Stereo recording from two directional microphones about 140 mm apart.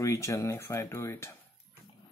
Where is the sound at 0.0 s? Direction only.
20° left (ahead or behind).